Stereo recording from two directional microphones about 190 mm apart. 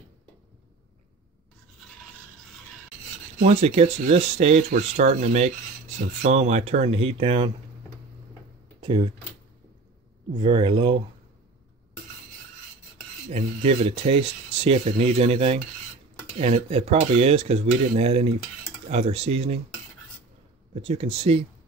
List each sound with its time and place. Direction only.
3.3 s speech: 35° right (ahead or behind)
8.8 s speech: 25° right (ahead or behind)
10.4 s speech: 25° right (ahead or behind)
13.3 s speech: 30° right (ahead or behind)
20.7 s speech: 35° right (ahead or behind)